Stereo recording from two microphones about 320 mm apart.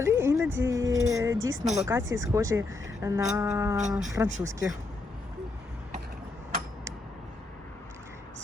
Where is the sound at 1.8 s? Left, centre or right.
Centre.